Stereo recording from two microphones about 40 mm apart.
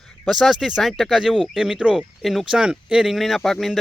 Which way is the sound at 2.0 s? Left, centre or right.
Centre.